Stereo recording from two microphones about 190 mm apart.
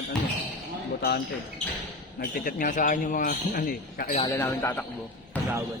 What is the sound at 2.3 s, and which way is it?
A man's voice, 45° left (ahead or behind).